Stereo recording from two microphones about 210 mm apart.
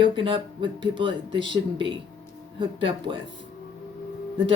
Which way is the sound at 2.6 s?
25° right (ahead or behind).